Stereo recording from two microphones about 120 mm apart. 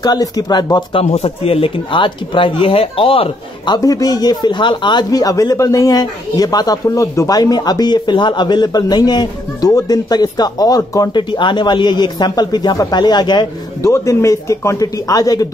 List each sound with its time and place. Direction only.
0.0 s speech: 35° left (ahead or behind)
1.0 s speech: 60° left (ahead or behind); by 11.1 s 30° left (ahead or behind)
11.1 s speech: 40° left (ahead or behind)
13.8 s speech: 25° left (ahead or behind)